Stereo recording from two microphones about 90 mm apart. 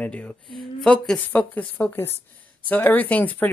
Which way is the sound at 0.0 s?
15° left (ahead or behind).